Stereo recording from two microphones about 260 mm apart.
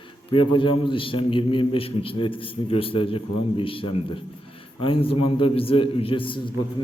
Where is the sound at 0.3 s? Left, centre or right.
Centre.